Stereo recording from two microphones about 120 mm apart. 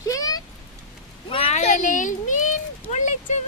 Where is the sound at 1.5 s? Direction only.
70° left (ahead or behind).